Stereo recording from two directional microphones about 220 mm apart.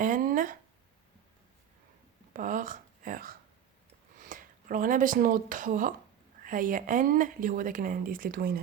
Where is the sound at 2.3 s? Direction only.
35° right (ahead or behind).